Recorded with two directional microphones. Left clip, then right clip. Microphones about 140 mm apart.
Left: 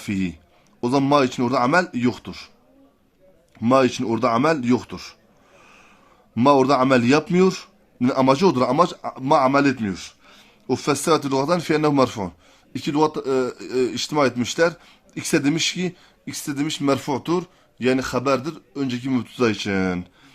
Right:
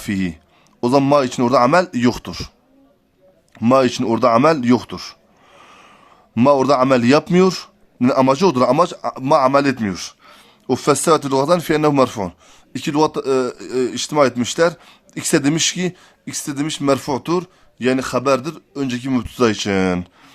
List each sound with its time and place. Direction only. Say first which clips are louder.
0.0 s speech: right 3 dB; 35° right (ahead or behind); by 2.5 s 55° right (ahead or behind)
3.5 s speech: right 3 dB; 40° right (ahead or behind)
6.3 s speech: right 3 dB; 40° right (ahead or behind)